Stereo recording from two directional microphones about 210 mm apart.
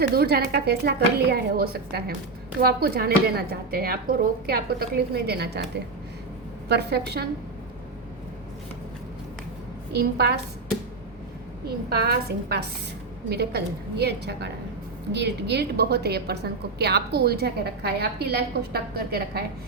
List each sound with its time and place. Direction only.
0.1 s a woman's voice: 50° right (ahead or behind)
9.9 s a woman's voice: 50° right (ahead or behind)
11.9 s a woman's voice: 50° right (ahead or behind)